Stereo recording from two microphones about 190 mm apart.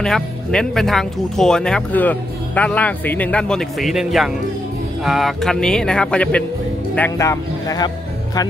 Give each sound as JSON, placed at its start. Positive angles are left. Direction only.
{"t": 0.0, "sound": "speech", "side_deg": 5}